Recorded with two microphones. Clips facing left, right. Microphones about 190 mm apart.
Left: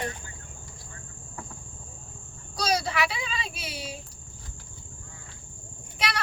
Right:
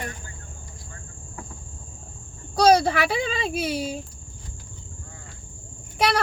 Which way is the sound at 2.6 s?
55° right (ahead or behind).